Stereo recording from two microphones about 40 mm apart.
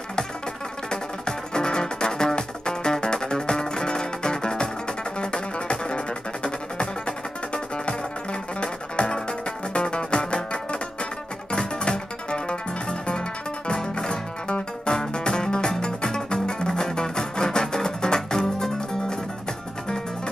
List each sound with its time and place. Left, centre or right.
0.8 s music: centre